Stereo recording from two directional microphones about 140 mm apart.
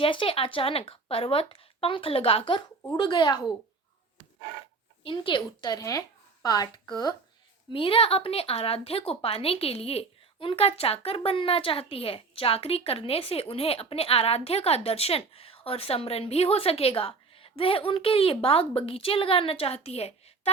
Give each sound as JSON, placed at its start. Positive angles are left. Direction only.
{"t": 0.0, "sound": "speech", "side_deg": 40}
{"t": 5.0, "sound": "a woman's voice", "side_deg": 35}
{"t": 7.7, "sound": "speech", "side_deg": 40}